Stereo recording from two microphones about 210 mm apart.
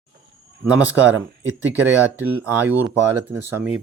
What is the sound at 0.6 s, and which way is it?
Speech, 5° right (ahead or behind).